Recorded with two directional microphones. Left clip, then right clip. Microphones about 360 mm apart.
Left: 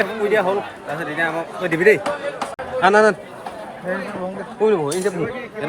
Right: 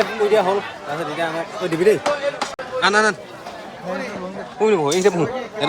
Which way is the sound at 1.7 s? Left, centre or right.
Centre.